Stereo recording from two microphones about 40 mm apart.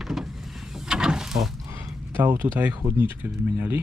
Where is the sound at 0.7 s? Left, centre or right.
Centre.